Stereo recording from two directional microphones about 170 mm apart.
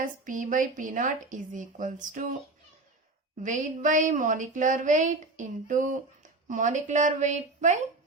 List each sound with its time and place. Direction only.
0.0 s a woman's voice: 50° right (ahead or behind)
3.4 s a woman's voice: 50° right (ahead or behind)